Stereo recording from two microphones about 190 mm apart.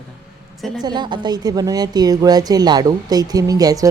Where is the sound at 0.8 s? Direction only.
20° right (ahead or behind).